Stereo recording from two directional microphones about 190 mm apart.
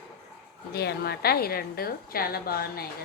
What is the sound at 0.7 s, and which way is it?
A woman's voice, 55° left (ahead or behind).